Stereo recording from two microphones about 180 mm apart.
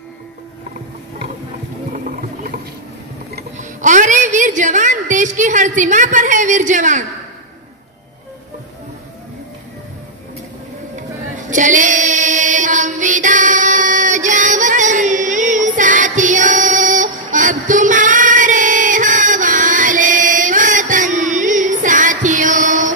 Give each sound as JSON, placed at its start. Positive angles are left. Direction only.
{"t": 1.9, "sound": "music", "side_deg": -50}
{"t": 3.5, "sound": "a woman's voice", "side_deg": -45}
{"t": 11.5, "sound": "female singing", "side_deg": -45}